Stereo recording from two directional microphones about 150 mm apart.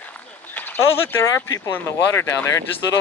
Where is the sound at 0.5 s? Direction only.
10° left (ahead or behind).